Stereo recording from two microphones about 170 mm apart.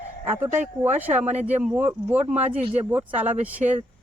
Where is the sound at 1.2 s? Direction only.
40° right (ahead or behind).